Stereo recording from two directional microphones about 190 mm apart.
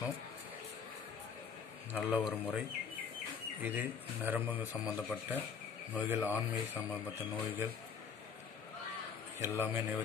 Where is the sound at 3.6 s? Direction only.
10° right (ahead or behind).